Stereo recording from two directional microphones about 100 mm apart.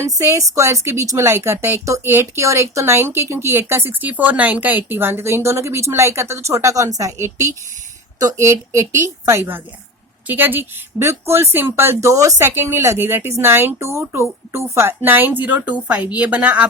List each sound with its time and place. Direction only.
0.2 s speech: 30° right (ahead or behind); by 16.6 s 15° right (ahead or behind)